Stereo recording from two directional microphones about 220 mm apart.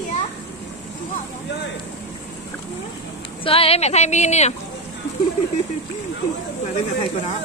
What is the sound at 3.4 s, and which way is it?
Speech, 25° left (ahead or behind).